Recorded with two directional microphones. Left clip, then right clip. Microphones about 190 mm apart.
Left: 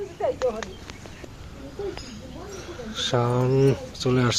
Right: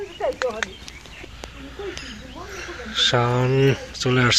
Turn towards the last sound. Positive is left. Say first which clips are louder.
# right 4 dB
turn(degrees=0)  # may be behind; listen again after turning